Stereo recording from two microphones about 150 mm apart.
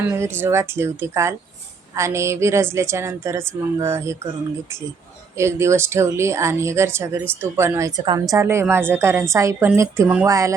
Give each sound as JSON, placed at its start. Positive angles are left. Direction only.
{"t": 0.1, "sound": "a woman's voice", "side_deg": -15}
{"t": 5.4, "sound": "a woman's voice", "side_deg": -20}